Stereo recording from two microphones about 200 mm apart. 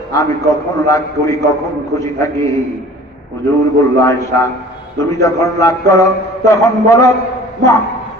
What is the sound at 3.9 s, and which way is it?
A man's voice, 15° left (ahead or behind).